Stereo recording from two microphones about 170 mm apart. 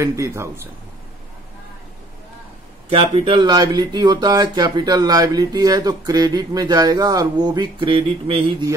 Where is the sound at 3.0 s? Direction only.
35° right (ahead or behind).